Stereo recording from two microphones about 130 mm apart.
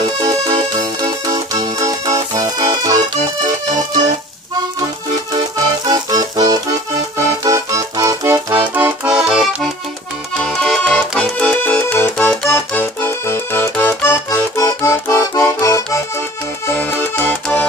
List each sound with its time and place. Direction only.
0.7 s music: 30° right (ahead or behind)
5.9 s music: 30° right (ahead or behind); by 9.7 s 5° right (ahead or behind)
10.4 s accordion: 5° left (ahead or behind)